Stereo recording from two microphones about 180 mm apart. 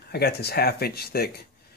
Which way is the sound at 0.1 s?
60° left (ahead or behind).